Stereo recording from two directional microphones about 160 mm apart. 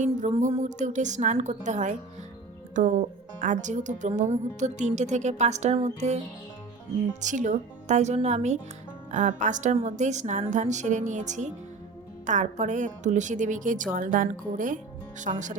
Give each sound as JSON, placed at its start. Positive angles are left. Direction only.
{"t": 0.0, "sound": "speech", "side_deg": -50}
{"t": 7.2, "sound": "speech", "side_deg": -50}